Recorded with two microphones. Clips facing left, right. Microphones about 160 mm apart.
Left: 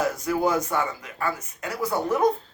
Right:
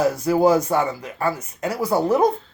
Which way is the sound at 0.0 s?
35° right (ahead or behind).